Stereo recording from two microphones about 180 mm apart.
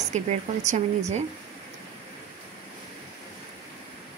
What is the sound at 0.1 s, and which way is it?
Speech, 40° right (ahead or behind).